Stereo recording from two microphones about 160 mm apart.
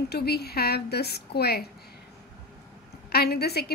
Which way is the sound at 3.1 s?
85° left.